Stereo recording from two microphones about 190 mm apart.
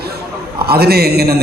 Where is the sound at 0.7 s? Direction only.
55° right (ahead or behind).